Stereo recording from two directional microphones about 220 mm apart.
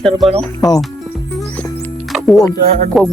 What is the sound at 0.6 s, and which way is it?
Speech, 15° left (ahead or behind).